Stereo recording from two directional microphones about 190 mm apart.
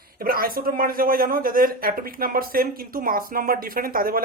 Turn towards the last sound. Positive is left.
turn(degrees=-50)  # may be behind; listen again after turning